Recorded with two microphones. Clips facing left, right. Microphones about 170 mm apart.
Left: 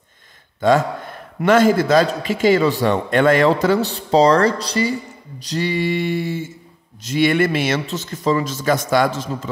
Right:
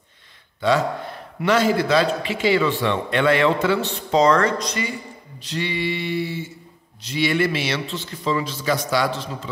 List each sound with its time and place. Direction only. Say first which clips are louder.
0.6 s a man's voice: left 4 dB; 50° left (ahead or behind)